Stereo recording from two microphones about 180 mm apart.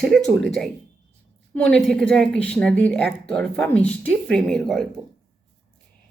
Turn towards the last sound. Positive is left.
turn(degrees=0)  # may be behind; listen again after turning